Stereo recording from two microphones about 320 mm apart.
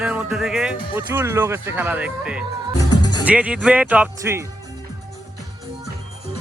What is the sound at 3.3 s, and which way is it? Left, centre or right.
Speech, centre.